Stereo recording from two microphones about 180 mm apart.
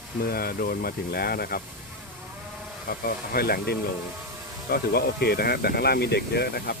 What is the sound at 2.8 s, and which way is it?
Speech, 55° left (ahead or behind).